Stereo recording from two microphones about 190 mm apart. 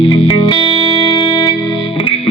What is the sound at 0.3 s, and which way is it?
Music, 25° left (ahead or behind).